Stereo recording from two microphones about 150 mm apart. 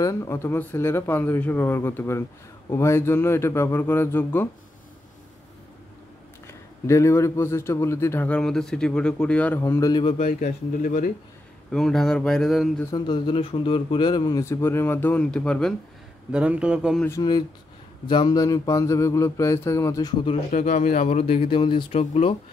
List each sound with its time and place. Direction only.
0.0 s a man's voice: 20° left (ahead or behind)
6.4 s a man's voice: 20° left (ahead or behind)
9.6 s speech: 20° left (ahead or behind)
10.1 s speech: 50° left (ahead or behind)
11.7 s speech: 5° left (ahead or behind)
12.9 s speech: 30° left (ahead or behind); by 15.7 s 5° left (ahead or behind)
16.3 s a man's voice: 5° right (ahead or behind)
18.0 s speech: 30° left (ahead or behind)
20.5 s speech: 50° left (ahead or behind); by 22.0 s 35° left (ahead or behind)